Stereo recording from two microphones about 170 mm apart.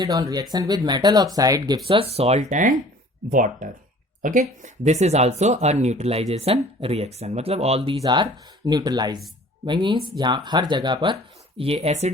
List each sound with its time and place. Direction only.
0.0 s speech: 20° right (ahead or behind); by 7.8 s 35° right (ahead or behind)
8.0 s speech: 25° right (ahead or behind); by 12.1 s 40° right (ahead or behind)